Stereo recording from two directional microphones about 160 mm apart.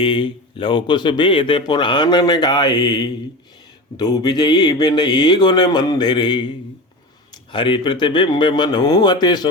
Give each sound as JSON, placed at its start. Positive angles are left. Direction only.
{"t": 0.0, "sound": "a man's voice", "side_deg": 30}
{"t": 7.5, "sound": "a man's voice", "side_deg": 30}